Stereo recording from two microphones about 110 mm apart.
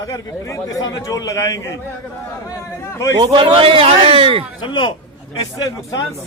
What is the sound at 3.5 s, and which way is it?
Speech, 60° right (ahead or behind).